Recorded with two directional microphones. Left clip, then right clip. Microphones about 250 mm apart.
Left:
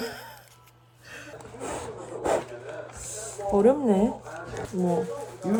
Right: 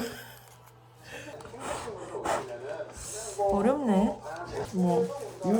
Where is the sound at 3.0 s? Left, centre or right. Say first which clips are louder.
Right 5 dB; centre.